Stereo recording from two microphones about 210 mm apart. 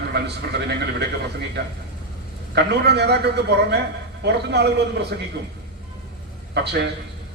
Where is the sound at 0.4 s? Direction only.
50° right (ahead or behind).